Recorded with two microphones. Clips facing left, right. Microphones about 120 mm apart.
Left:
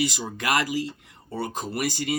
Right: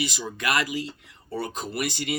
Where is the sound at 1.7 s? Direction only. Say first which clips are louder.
Left 2 dB; 45° left (ahead or behind).